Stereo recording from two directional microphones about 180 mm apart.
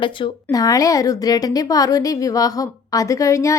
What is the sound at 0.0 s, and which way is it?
A woman's voice, 25° left (ahead or behind).